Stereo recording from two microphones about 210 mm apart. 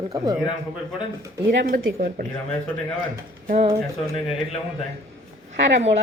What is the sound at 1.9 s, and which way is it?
Speech, 45° right (ahead or behind).